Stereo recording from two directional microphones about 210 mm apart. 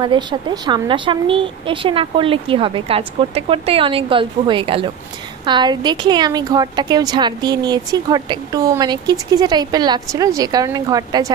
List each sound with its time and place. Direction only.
0.0 s a woman's voice: 20° right (ahead or behind)